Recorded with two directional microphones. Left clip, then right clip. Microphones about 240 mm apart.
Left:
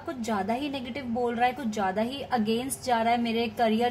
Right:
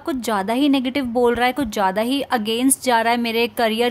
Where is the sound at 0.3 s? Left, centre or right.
Right.